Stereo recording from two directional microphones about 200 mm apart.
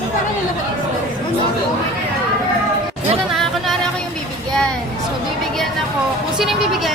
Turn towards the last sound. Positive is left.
turn(degrees=0)  # may be behind; listen again after turning